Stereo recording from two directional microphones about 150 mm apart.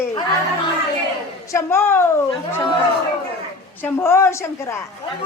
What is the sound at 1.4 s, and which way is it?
Speech, 15° left (ahead or behind).